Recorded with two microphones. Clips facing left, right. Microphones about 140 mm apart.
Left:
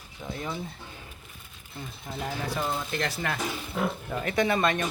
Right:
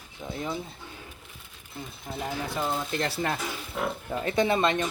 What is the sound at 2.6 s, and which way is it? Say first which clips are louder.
Speech: right 2 dB; 5° right (ahead or behind).